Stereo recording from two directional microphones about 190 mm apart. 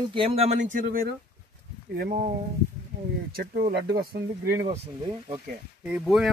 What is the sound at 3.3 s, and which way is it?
Speech, 55° right (ahead or behind).